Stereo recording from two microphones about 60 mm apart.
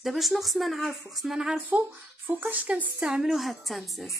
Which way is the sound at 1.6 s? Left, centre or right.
Right.